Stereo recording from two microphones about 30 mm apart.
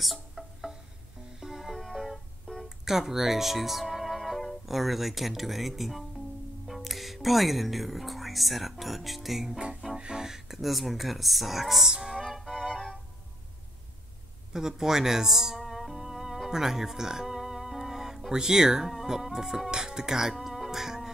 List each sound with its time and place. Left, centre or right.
0.0 s music: centre
2.0 s music: centre
2.8 s speech: centre
9.9 s music: right
10.2 s a sound: centre
10.6 s speech: centre
11.9 s music: right
12.2 s music: centre
12.7 s music: centre
14.5 s speech: centre
15.6 s music: centre
18.3 s speech: centre
19.7 s music: right